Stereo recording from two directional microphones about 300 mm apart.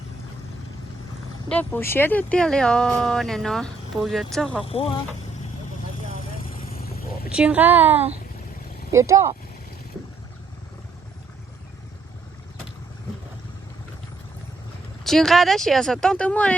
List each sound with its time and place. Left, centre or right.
1.5 s speech: centre
4.7 s speech: centre
7.3 s speech: centre
15.0 s speech: centre